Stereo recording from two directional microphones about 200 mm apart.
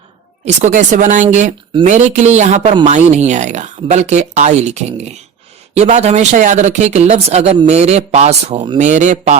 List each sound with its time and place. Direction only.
0.4 s speech: 35° right (ahead or behind)